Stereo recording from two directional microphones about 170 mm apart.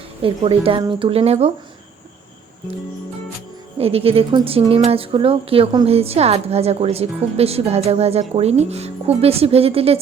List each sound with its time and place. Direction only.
0.2 s a woman's voice: 30° right (ahead or behind)
3.8 s a woman's voice: 35° right (ahead or behind)